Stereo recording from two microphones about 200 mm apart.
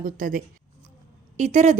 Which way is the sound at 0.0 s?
45° right (ahead or behind).